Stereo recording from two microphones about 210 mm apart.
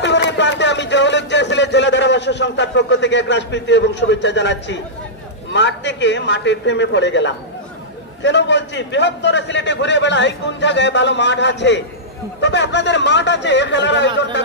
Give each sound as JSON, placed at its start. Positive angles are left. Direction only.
{"t": 0.0, "sound": "a man's voice", "side_deg": 55}